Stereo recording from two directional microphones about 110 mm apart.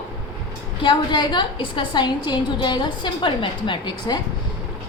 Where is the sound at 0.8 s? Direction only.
45° left (ahead or behind).